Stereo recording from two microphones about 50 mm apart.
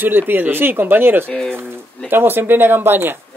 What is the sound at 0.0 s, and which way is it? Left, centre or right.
Speech, right.